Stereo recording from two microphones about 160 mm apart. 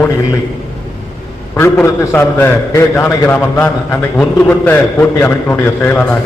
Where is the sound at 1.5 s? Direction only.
15° left (ahead or behind).